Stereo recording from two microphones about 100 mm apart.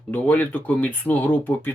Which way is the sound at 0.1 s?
15° left (ahead or behind).